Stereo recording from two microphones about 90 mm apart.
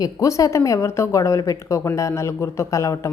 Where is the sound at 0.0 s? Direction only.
35° left (ahead or behind).